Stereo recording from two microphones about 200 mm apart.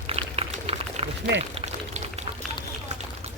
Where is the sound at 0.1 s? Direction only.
30° right (ahead or behind).